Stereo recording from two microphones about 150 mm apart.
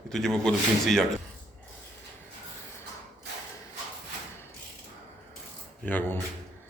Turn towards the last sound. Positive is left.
turn(degrees=10)  # may be behind; listen again after turning